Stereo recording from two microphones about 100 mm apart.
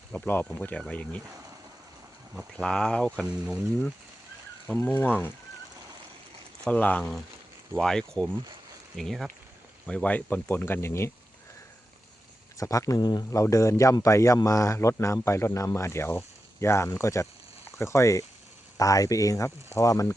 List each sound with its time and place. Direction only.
0.3 s speech: 20° left (ahead or behind)
2.6 s speech: 5° left (ahead or behind)
4.8 s speech: 20° left (ahead or behind)
6.7 s speech: 15° left (ahead or behind)
9.8 s speech: 10° left (ahead or behind)
12.5 s speech: 35° left (ahead or behind)
13.4 s speech: 30° left (ahead or behind)